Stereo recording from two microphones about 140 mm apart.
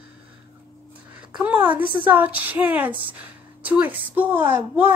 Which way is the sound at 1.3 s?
10° right (ahead or behind).